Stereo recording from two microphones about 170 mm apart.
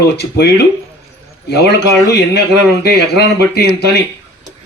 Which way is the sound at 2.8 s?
70° left (ahead or behind).